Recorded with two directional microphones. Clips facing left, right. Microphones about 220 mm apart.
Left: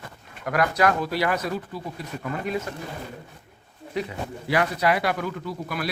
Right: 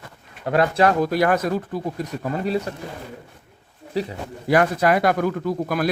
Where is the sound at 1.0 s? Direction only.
50° right (ahead or behind).